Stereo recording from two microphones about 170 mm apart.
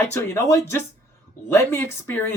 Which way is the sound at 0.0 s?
15° left (ahead or behind).